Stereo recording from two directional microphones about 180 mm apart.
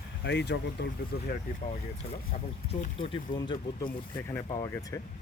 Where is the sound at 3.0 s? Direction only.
30° left (ahead or behind).